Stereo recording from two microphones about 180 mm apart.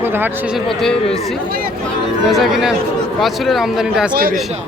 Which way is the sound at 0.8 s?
5° left (ahead or behind).